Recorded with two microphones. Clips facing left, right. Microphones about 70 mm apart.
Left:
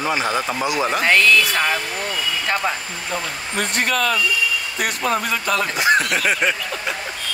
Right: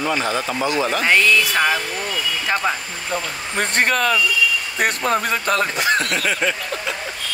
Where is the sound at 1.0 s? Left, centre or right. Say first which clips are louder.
Left 1 dB; centre.